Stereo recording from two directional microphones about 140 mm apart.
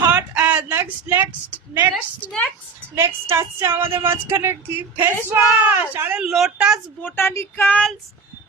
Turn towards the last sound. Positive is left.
turn(degrees=10)  # may be behind; listen again after turning